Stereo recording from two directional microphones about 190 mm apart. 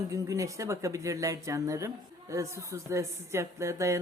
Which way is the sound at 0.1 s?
15° right (ahead or behind).